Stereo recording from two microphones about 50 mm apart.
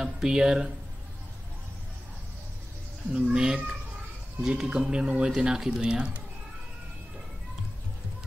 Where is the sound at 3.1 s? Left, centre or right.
Centre.